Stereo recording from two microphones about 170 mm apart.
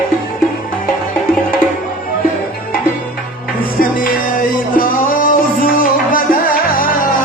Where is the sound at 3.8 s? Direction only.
55° left (ahead or behind).